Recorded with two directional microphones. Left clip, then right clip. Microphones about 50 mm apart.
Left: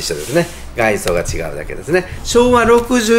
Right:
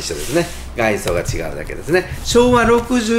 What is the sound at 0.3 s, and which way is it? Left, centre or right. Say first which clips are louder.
Speech: left 2 dB; centre.